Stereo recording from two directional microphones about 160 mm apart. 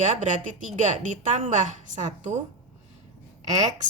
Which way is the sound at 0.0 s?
50° right (ahead or behind).